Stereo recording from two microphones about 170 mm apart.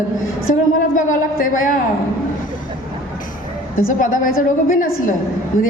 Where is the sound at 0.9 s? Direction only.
50° left (ahead or behind).